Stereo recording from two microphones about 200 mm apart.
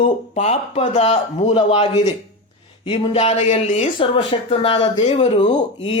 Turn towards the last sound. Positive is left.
turn(degrees=25)  # may be behind; listen again after turning